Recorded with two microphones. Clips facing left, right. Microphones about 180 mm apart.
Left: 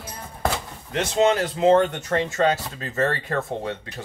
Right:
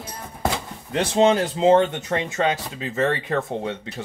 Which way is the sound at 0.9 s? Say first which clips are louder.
Right 2 dB; 30° right (ahead or behind).